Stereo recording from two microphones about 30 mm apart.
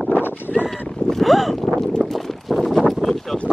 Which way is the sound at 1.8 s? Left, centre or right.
Centre.